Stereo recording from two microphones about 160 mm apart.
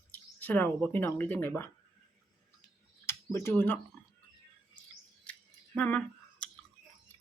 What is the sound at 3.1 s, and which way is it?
Speech, 15° left (ahead or behind).